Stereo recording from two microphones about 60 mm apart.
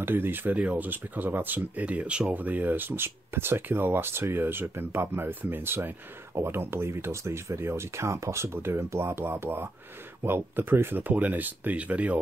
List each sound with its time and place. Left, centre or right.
0.0 s speech: right; by 2.3 s centre
2.3 s speech: right